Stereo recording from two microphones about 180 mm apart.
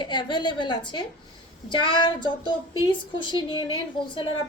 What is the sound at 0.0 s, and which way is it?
A woman's voice, 25° left (ahead or behind).